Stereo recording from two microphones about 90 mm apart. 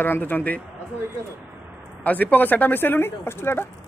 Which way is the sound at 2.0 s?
20° left (ahead or behind).